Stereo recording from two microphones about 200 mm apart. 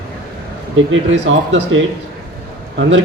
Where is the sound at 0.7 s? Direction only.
65° right (ahead or behind).